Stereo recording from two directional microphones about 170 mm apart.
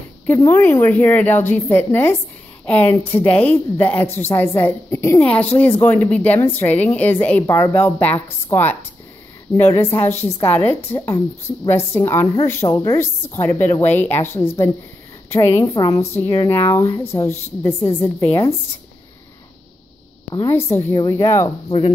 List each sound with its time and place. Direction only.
0.3 s a woman's voice: 15° left (ahead or behind)
20.4 s a woman's voice: 15° left (ahead or behind)
21.6 s speech: 30° left (ahead or behind)